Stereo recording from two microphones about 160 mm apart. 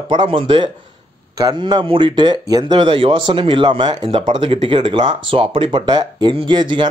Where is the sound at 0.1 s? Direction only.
30° right (ahead or behind).